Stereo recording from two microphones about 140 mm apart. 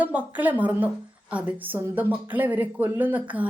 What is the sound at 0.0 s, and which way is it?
A woman's voice, 10° right (ahead or behind).